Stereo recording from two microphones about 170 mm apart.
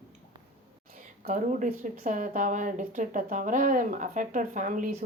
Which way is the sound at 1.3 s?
50° right (ahead or behind).